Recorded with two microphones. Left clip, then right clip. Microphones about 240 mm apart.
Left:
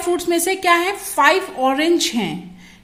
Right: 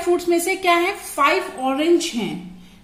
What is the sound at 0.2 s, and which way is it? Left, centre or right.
A woman's voice, left.